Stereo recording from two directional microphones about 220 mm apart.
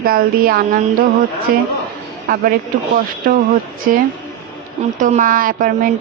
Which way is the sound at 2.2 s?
40° right (ahead or behind).